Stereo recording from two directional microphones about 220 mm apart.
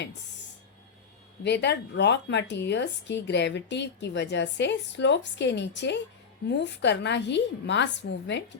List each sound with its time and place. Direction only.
1.5 s speech: 50° left (ahead or behind)